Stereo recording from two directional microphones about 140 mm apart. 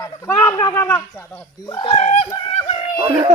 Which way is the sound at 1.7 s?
30° left (ahead or behind).